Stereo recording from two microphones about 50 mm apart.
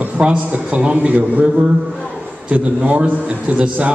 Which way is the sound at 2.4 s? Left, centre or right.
Right.